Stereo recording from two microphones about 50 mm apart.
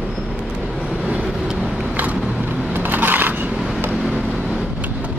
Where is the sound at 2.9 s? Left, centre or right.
Right.